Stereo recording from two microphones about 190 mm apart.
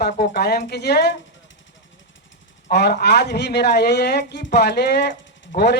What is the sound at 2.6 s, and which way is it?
Speech, 60° left (ahead or behind).